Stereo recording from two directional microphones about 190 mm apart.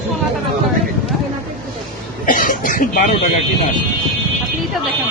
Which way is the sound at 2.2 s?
45° left (ahead or behind).